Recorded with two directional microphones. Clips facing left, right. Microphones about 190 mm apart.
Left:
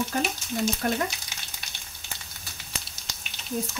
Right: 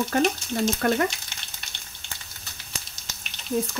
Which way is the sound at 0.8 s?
75° right (ahead or behind).